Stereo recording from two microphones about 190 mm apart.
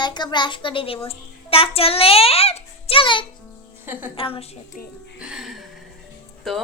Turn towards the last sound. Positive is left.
turn(degrees=0)  # may be behind; listen again after turning